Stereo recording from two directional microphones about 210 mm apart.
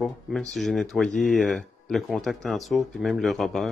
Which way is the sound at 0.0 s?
Centre (ahead or behind).